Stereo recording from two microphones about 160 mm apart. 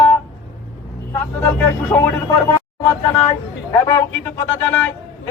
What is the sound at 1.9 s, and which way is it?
Speech, 15° left (ahead or behind).